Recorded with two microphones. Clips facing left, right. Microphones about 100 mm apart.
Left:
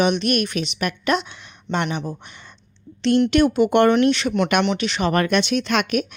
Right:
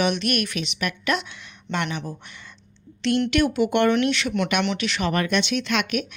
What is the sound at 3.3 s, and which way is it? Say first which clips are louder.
Speech: left 4 dB; 30° left (ahead or behind).